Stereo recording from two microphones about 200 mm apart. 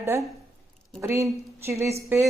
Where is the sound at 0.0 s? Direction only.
15° right (ahead or behind).